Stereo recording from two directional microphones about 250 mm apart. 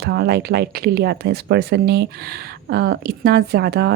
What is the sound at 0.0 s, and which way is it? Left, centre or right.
Speech, right.